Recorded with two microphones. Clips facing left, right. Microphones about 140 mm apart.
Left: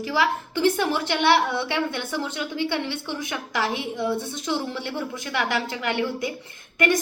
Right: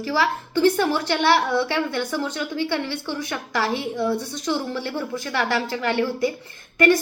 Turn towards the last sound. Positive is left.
turn(degrees=20)  # may be behind; listen again after turning